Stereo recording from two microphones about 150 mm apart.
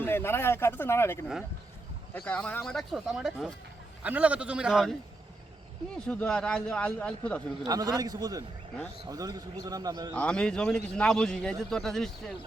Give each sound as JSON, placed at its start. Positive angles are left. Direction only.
{"t": 0.0, "sound": "a man's voice", "side_deg": 15}
{"t": 6.1, "sound": "a man's voice", "side_deg": 5}
{"t": 7.7, "sound": "a man's voice", "side_deg": -25}
{"t": 10.2, "sound": "a man's voice", "side_deg": 5}